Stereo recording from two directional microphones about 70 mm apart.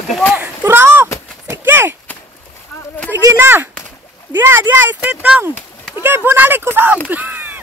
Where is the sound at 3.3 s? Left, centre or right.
Right.